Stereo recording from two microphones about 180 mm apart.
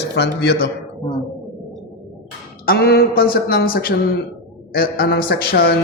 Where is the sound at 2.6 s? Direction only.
60° left (ahead or behind).